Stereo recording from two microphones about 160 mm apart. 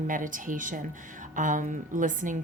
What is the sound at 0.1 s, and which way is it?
A woman's voice, 55° right (ahead or behind).